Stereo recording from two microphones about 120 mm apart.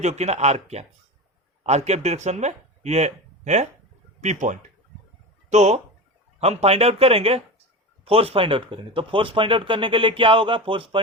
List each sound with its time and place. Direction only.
0.0 s speech: 65° right (ahead or behind)
5.5 s speech: 70° right (ahead or behind)
6.4 s speech: 60° right (ahead or behind)